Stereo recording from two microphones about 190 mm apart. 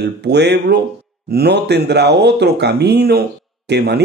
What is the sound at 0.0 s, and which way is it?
Speech, 60° right (ahead or behind).